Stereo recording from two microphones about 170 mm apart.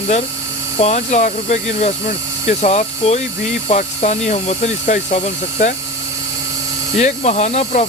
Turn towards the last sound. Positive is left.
turn(degrees=40)  # may be behind; listen again after turning